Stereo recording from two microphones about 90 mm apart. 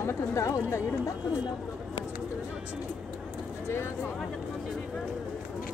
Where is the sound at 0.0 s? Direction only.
35° left (ahead or behind).